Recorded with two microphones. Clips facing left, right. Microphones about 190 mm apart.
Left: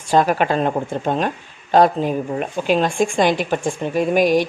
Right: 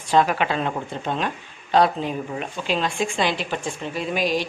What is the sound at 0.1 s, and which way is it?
A woman's voice, 45° left (ahead or behind).